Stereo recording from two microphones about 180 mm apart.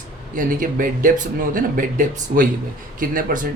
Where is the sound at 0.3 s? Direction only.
50° right (ahead or behind).